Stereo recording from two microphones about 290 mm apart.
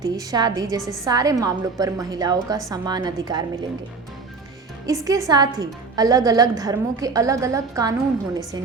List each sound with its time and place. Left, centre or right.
0.0 s a woman's voice: centre
4.9 s a woman's voice: centre